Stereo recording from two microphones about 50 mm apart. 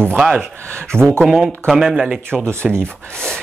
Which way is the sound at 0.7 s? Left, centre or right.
Right.